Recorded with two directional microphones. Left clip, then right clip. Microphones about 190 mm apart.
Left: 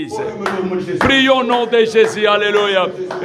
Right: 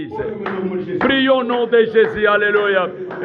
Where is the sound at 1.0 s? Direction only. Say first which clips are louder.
Left 3 dB; 25° left (ahead or behind).